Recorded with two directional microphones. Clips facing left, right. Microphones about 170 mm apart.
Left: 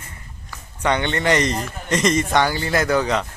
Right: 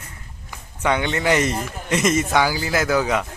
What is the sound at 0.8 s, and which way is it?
Speech, 5° right (ahead or behind).